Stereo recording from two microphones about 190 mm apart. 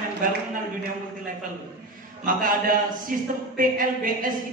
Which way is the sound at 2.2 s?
45° right (ahead or behind).